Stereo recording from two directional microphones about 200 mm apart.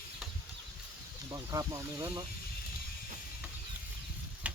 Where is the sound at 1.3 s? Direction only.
15° right (ahead or behind).